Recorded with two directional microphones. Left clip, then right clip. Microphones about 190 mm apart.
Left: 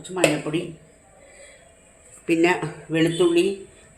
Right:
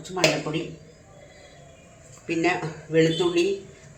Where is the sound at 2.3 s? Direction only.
60° left (ahead or behind).